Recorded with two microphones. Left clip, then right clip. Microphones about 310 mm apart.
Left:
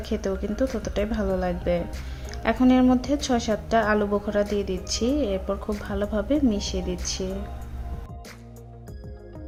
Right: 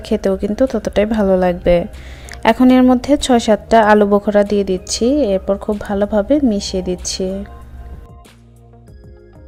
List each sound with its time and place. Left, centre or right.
0.0 s a woman's voice: right